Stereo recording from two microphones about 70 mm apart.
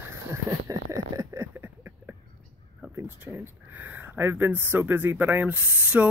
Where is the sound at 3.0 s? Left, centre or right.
Right.